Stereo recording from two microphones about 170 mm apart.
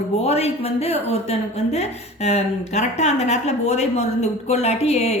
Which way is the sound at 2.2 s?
40° left (ahead or behind).